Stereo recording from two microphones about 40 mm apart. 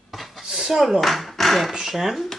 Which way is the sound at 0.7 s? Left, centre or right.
Centre.